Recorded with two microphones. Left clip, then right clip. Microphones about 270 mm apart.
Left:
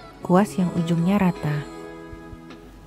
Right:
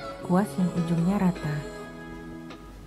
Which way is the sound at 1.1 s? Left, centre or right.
Left.